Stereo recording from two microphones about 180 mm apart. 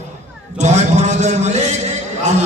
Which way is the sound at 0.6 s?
40° right (ahead or behind).